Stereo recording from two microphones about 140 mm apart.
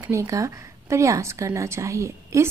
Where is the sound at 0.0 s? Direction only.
25° right (ahead or behind).